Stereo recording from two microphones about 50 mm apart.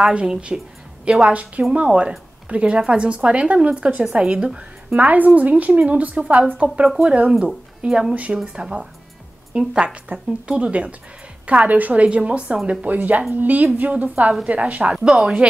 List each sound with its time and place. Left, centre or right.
0.0 s a woman's voice: centre
7.2 s a woman's voice: centre
12.6 s a woman's voice: right
15.0 s speech: centre